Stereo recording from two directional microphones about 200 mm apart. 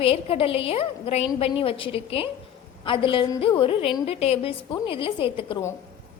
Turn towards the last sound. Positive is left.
turn(degrees=25)  # may be behind; listen again after turning